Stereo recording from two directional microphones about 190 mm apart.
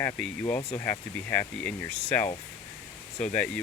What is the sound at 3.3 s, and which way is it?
Speech, 5° left (ahead or behind).